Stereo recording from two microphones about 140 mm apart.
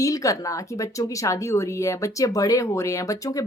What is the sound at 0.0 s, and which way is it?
A woman's voice, 25° left (ahead or behind).